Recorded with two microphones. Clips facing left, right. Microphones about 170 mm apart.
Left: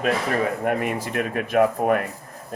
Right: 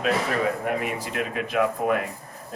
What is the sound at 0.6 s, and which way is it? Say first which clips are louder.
Speech: left 3 dB; 50° left (ahead or behind).